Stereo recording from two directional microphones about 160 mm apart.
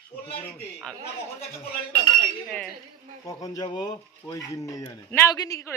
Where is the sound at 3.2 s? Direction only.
20° left (ahead or behind).